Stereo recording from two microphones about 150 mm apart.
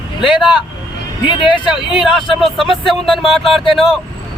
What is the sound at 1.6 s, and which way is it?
Speech, 5° right (ahead or behind).